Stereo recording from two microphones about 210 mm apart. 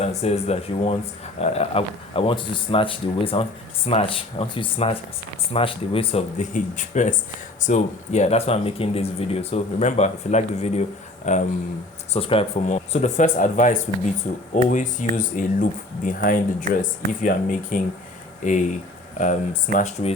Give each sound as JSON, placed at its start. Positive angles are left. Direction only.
{"t": 0.0, "sound": "speech", "side_deg": 30}